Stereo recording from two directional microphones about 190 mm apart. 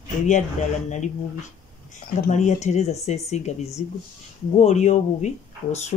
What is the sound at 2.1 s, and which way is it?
Speech, 40° left (ahead or behind).